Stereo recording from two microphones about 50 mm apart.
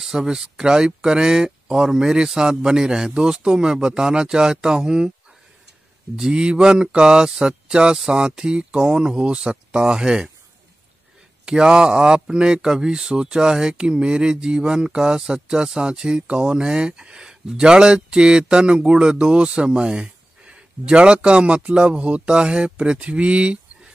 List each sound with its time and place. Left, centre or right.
0.0 s speech: centre
6.1 s speech: centre
11.4 s speech: centre